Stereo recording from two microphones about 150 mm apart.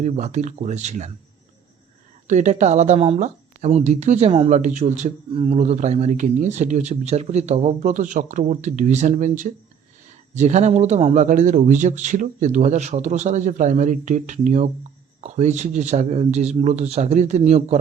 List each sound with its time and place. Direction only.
0.0 s speech: 50° right (ahead or behind)
2.2 s speech: 55° right (ahead or behind)
5.3 s a man's voice: 40° right (ahead or behind)
5.5 s a man's voice: 50° right (ahead or behind)